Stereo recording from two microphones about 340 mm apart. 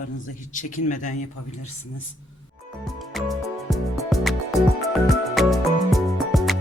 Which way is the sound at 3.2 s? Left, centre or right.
Centre.